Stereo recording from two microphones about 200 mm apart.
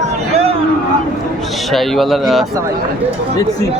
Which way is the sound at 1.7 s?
Centre (ahead or behind).